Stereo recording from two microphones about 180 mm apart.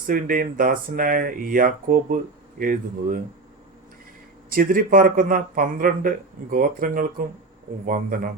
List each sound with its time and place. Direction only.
0.0 s speech: 50° right (ahead or behind)
4.4 s speech: 50° right (ahead or behind)